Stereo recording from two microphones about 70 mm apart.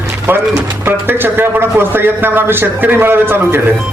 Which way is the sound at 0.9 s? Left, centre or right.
Right.